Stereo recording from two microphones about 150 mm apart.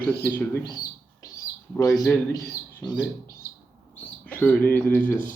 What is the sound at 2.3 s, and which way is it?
Speech, 25° left (ahead or behind).